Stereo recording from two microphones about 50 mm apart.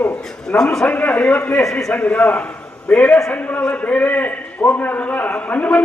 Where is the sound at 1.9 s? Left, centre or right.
Left.